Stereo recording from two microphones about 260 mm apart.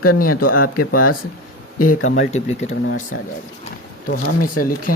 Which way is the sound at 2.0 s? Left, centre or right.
Left.